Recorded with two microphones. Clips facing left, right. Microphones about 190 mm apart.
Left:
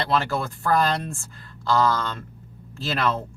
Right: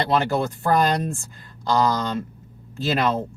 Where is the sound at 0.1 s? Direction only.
20° right (ahead or behind).